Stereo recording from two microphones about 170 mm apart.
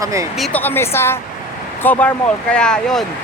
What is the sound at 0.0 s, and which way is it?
Speech, 20° right (ahead or behind).